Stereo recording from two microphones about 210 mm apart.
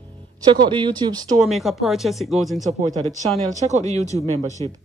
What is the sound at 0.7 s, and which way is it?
Speech, 20° right (ahead or behind).